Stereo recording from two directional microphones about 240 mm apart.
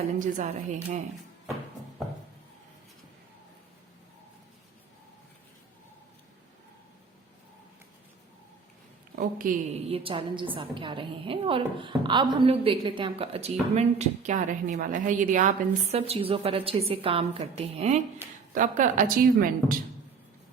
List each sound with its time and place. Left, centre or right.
0.2 s a woman's voice: right
9.1 s a woman's voice: right